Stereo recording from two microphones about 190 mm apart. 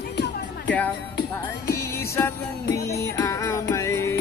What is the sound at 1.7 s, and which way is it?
Music, 15° left (ahead or behind).